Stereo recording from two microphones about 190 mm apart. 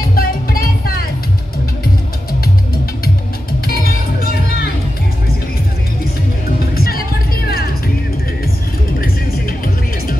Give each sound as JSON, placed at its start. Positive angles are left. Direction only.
{"t": 0.0, "sound": "music", "side_deg": 50}
{"t": 3.6, "sound": "music", "side_deg": 50}
{"t": 6.7, "sound": "music", "side_deg": 55}